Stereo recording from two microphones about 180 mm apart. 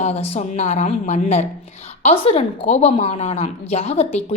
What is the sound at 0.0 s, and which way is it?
A woman's voice, 40° left (ahead or behind).